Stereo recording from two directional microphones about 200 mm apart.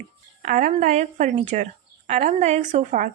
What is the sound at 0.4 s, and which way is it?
A woman's voice, 40° right (ahead or behind).